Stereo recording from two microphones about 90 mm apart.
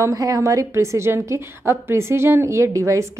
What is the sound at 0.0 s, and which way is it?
A woman's voice, 40° right (ahead or behind).